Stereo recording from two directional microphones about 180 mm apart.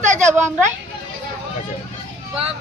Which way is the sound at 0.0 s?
40° right (ahead or behind).